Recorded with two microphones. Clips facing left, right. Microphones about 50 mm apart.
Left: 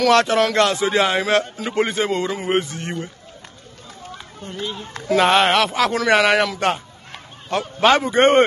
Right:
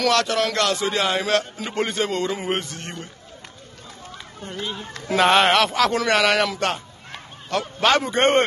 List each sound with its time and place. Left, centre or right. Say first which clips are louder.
0.1 s a man's voice: left 5 dB; left
4.4 s speech: left 1 dB; centre; by 7.7 s left
8.0 s a man's voice: left 4 dB; centre